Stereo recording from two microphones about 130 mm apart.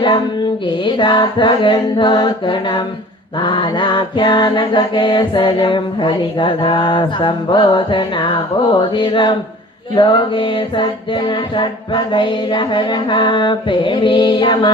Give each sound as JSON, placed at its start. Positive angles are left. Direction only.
{"t": 0.9, "sound": "mantra", "side_deg": 35}